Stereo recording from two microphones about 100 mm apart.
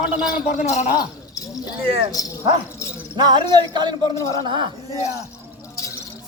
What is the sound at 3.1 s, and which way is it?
Music, 45° right (ahead or behind).